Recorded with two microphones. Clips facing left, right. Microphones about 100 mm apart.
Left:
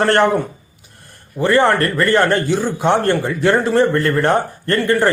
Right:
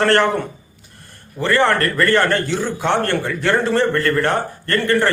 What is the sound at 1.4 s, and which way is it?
A man's voice, 15° left (ahead or behind).